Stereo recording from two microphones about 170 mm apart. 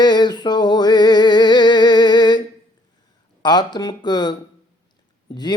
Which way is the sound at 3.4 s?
25° left (ahead or behind).